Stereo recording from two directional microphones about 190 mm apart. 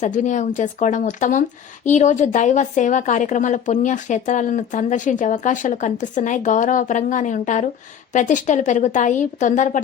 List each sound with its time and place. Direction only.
0.0 s speech: 40° left (ahead or behind)